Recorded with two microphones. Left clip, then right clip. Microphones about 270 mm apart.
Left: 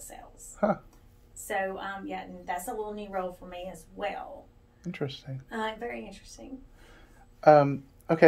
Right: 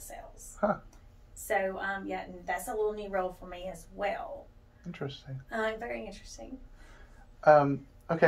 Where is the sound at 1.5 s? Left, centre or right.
Centre.